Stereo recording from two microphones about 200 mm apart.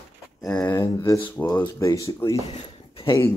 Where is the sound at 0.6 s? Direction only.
15° left (ahead or behind).